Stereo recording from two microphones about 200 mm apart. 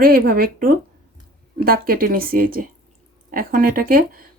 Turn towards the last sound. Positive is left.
turn(degrees=-45)  # may be behind; listen again after turning